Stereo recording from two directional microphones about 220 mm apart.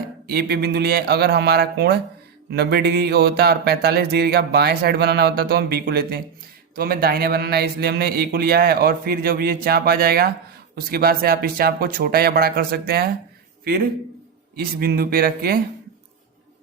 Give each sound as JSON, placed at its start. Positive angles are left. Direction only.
{"t": 0.3, "sound": "mantra", "side_deg": -45}
{"t": 14.5, "sound": "speech", "side_deg": -45}